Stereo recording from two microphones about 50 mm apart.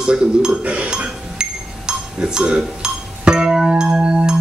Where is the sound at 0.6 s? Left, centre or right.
Right.